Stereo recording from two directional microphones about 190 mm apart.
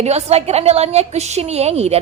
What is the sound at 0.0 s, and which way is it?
A woman's voice, 35° right (ahead or behind).